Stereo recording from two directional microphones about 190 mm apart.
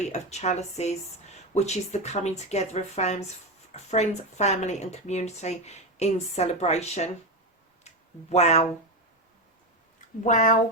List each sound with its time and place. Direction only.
0.0 s speech: 35° left (ahead or behind)
7.9 s a sound: 35° left (ahead or behind)
10.2 s speech: 40° left (ahead or behind)